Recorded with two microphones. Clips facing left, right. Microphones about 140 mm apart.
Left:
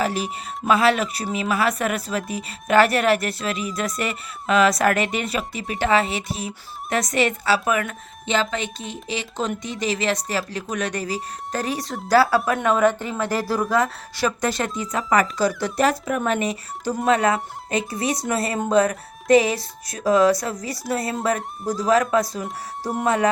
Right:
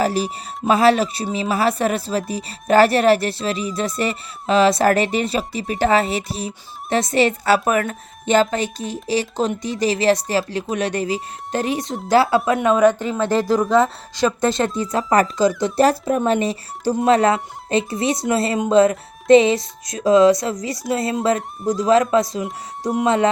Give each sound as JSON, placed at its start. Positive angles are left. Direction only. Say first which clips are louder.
{"t": 0.0, "sound": "speech", "louder": "right 4 dB", "side_deg": -35}
{"t": 7.4, "sound": "a woman's voice", "louder": "right 4 dB", "side_deg": -45}
{"t": 21.6, "sound": "speech", "louder": "right 5 dB", "side_deg": 0}
{"t": 22.1, "sound": "speech", "louder": "right 3 dB", "side_deg": -25}
{"t": 22.4, "sound": "speech", "louder": "right 3 dB", "side_deg": 0}
{"t": 23.0, "sound": "speech", "louder": "right 2 dB", "side_deg": -25}